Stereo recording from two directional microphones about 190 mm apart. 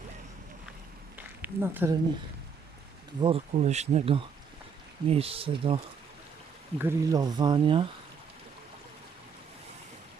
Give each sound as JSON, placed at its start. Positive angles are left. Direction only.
{"t": 1.4, "sound": "speech", "side_deg": -10}
{"t": 3.2, "sound": "speech", "side_deg": -30}
{"t": 6.7, "sound": "speech", "side_deg": -15}